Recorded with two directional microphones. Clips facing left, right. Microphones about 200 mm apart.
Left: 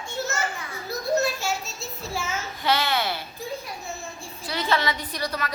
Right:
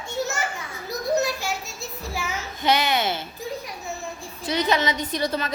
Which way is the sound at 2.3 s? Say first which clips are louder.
Right 3 dB; 20° right (ahead or behind).